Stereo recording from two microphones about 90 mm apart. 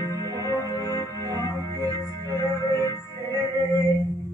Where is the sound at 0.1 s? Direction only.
40° right (ahead or behind).